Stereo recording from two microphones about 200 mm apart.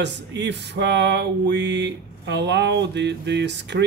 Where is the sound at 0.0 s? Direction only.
60° right (ahead or behind).